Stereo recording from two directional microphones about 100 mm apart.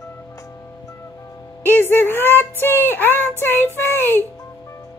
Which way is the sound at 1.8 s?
20° left (ahead or behind).